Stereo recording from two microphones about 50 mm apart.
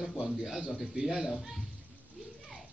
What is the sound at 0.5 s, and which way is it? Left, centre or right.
A man's voice, centre.